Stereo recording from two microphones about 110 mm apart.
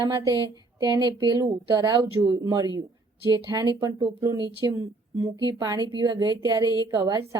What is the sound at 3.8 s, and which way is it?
A woman's voice, 45° right (ahead or behind).